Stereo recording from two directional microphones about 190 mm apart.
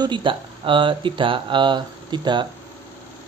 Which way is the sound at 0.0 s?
25° right (ahead or behind).